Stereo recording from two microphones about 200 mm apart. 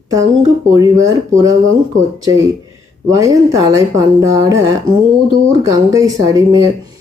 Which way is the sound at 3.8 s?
15° right (ahead or behind).